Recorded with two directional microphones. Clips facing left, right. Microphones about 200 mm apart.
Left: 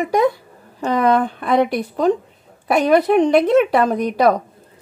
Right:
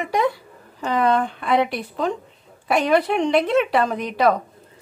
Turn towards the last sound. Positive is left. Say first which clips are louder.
# left 4 dB
turn(degrees=40)  # may be behind; listen again after turning